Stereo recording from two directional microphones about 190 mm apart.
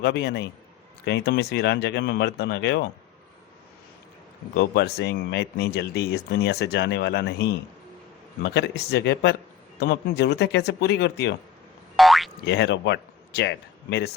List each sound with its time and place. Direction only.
0.0 s speech: 60° left (ahead or behind)
4.5 s speech: 60° left (ahead or behind)
11.9 s boing: centre (ahead or behind)
12.5 s speech: 60° left (ahead or behind)